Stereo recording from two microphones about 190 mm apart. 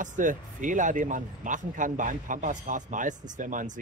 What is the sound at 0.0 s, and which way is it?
Speech, 40° right (ahead or behind).